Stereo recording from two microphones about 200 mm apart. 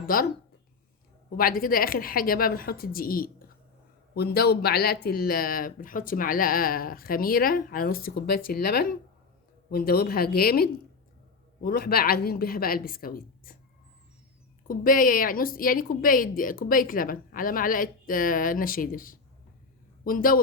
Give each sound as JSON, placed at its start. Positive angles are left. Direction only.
{"t": 0.1, "sound": "speech", "side_deg": 45}
{"t": 1.4, "sound": "speech", "side_deg": 45}
{"t": 14.7, "sound": "speech", "side_deg": 45}